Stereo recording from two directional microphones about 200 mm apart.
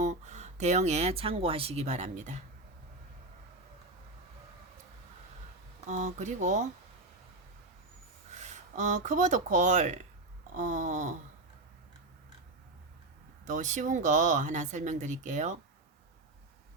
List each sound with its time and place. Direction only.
0.0 s speech: 35° right (ahead or behind)
5.9 s speech: 35° right (ahead or behind)
8.3 s speech: 35° right (ahead or behind)
13.4 s speech: 40° right (ahead or behind)